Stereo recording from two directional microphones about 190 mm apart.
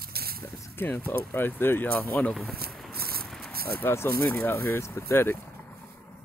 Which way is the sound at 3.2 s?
Centre (ahead or behind).